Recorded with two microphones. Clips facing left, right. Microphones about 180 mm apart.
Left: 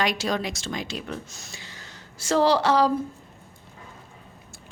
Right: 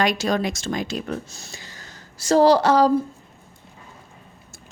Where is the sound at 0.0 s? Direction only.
50° right (ahead or behind).